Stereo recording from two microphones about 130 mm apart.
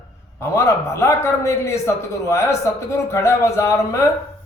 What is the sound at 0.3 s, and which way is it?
A man's voice, 20° left (ahead or behind).